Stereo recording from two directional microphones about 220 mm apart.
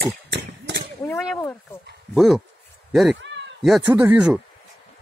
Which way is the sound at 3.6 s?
5° right (ahead or behind).